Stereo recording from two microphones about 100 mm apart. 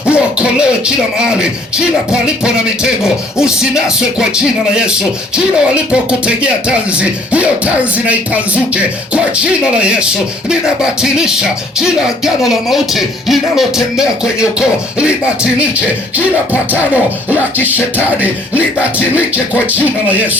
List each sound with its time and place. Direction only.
0.0 s speech: 10° right (ahead or behind)
17.9 s speech: 15° right (ahead or behind)